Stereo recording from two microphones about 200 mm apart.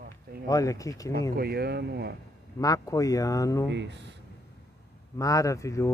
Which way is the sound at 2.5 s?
15° left (ahead or behind).